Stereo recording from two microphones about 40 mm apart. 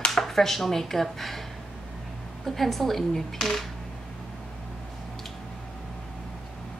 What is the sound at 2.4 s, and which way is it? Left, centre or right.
Speech, centre.